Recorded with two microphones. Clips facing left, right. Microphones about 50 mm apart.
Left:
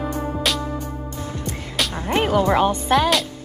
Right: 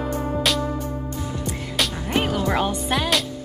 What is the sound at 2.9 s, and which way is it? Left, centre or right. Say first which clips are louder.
Music: left 5 dB; centre.